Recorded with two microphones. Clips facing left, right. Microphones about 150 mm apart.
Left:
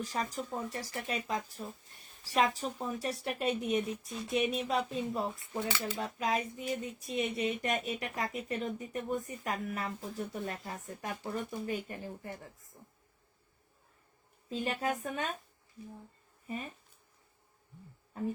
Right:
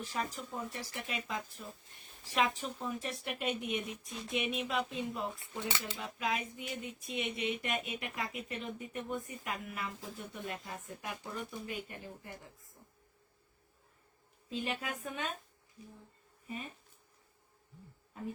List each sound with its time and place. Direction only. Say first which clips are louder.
0.0 s speech: left 3 dB; 40° left (ahead or behind)
5.4 s speech: left 3 dB; 20° right (ahead or behind)
5.9 s speech: left 4 dB; 40° left (ahead or behind)
14.5 s speech: left 5 dB; 40° left (ahead or behind)